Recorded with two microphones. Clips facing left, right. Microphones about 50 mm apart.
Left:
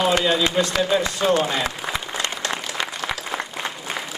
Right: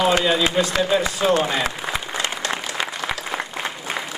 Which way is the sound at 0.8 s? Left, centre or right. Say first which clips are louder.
Right 1 dB; centre.